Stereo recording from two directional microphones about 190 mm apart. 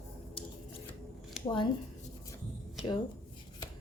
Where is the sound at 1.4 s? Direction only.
Centre (ahead or behind).